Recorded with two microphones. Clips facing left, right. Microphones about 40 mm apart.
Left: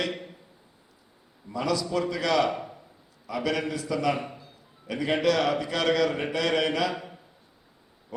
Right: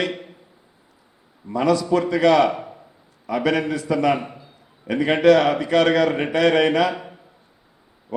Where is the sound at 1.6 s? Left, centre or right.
Right.